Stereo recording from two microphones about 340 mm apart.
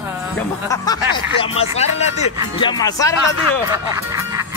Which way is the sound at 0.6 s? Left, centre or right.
Centre.